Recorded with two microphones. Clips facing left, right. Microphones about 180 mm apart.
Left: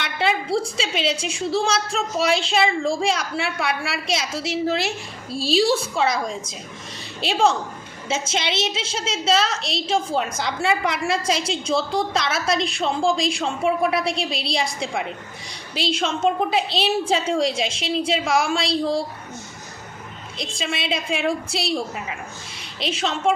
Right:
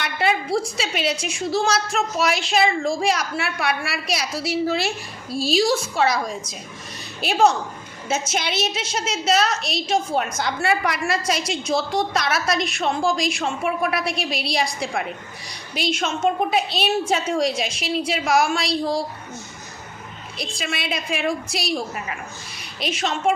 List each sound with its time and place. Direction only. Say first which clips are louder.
0.0 s a woman's voice: right 1 dB; 25° left (ahead or behind)
20.4 s a woman's voice: left 1 dB; 25° left (ahead or behind)